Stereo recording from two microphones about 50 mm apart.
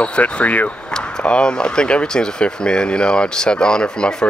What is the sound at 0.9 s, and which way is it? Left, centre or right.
Speech, centre.